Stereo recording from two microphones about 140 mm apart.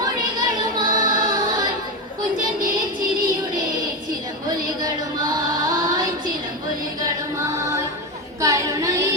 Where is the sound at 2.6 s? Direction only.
90° right.